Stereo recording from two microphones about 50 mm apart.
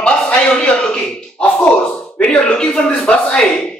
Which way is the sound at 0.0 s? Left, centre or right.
Left.